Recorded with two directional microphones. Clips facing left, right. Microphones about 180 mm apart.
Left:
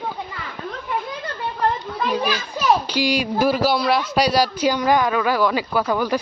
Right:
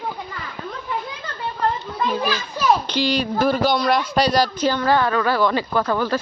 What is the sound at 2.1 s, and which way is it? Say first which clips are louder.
A man's voice: left 1 dB; 15° left (ahead or behind).